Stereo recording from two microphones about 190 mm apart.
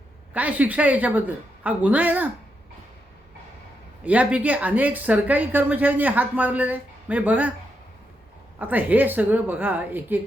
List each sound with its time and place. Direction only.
0.3 s a woman's voice: 10° right (ahead or behind)
4.0 s a woman's voice: 5° right (ahead or behind)
8.5 s a woman's voice: 10° right (ahead or behind)